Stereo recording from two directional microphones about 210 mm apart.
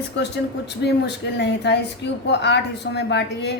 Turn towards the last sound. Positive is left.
turn(degrees=55)  # may be behind; listen again after turning